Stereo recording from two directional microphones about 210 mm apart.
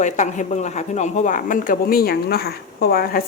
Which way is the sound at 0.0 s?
35° left (ahead or behind).